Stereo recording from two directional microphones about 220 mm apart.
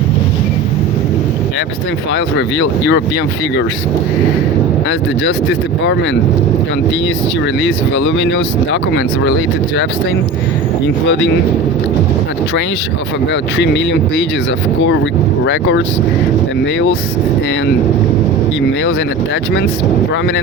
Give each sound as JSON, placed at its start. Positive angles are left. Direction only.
{"t": 2.1, "sound": "speech", "side_deg": 55}
{"t": 4.9, "sound": "speech", "side_deg": 55}
{"t": 7.9, "sound": "speech", "side_deg": 60}
{"t": 10.8, "sound": "speech", "side_deg": 55}
{"t": 13.6, "sound": "speech", "side_deg": 50}
{"t": 15.4, "sound": "speech", "side_deg": 55}